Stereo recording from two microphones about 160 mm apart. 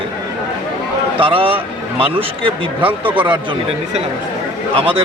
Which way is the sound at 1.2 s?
35° right (ahead or behind).